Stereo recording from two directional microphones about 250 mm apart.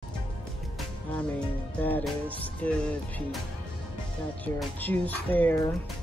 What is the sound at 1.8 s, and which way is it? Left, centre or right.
Speech, centre.